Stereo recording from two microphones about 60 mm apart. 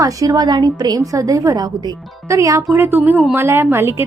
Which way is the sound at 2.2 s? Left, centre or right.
Right.